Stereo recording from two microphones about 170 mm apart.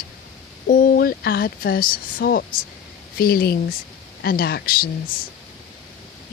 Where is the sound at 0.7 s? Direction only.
55° left (ahead or behind).